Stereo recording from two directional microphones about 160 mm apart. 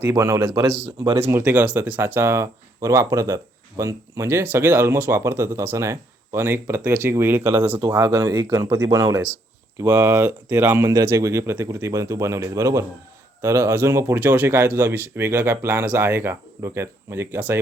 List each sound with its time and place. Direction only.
0.0 s speech: 20° right (ahead or behind)